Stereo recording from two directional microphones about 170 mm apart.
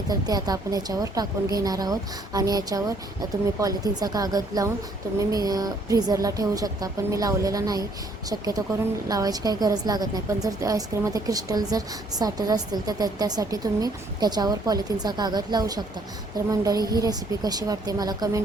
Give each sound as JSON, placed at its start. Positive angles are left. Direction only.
{"t": 0.1, "sound": "a woman's voice", "side_deg": -25}